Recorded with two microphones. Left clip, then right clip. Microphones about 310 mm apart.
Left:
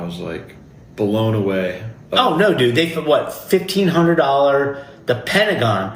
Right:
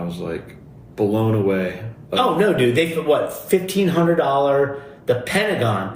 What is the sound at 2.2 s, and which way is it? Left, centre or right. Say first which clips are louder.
A man's voice: left 3 dB; left.